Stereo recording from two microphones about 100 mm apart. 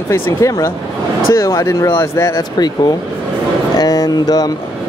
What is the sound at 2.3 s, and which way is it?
Speech, 40° left (ahead or behind).